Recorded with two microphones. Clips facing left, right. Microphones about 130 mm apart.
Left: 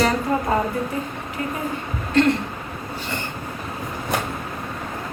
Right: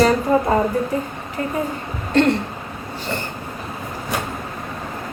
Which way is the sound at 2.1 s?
35° right (ahead or behind).